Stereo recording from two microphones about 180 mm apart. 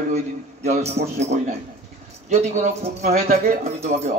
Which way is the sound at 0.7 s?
35° right (ahead or behind).